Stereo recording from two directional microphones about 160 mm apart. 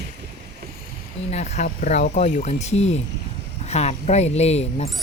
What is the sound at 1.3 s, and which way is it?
Speech, 45° left (ahead or behind).